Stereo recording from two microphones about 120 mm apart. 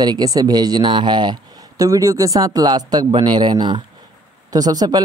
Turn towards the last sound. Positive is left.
turn(degrees=-35)  # may be behind; listen again after turning